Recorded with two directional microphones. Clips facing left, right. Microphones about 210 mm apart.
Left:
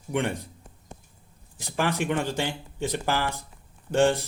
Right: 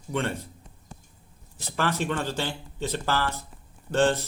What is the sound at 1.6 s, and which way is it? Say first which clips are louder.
Speech: left 1 dB; 15° left (ahead or behind).